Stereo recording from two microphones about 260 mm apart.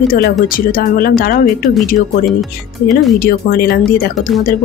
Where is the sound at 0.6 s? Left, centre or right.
Left.